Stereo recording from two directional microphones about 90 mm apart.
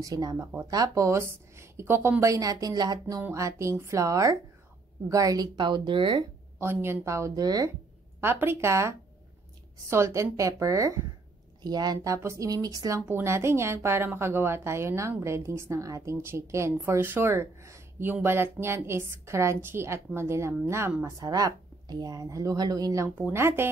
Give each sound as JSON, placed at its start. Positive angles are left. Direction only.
{"t": 0.0, "sound": "a woman's voice", "side_deg": -40}
{"t": 2.3, "sound": "a woman's voice", "side_deg": -40}
{"t": 6.6, "sound": "a woman's voice", "side_deg": -25}
{"t": 7.4, "sound": "a woman's voice", "side_deg": -45}
{"t": 8.2, "sound": "a woman's voice", "side_deg": -25}
{"t": 11.6, "sound": "a woman's voice", "side_deg": -50}
{"t": 13.0, "sound": "a woman's voice", "side_deg": -25}
{"t": 21.0, "sound": "a woman's voice", "side_deg": -45}
{"t": 23.3, "sound": "a woman's voice", "side_deg": -25}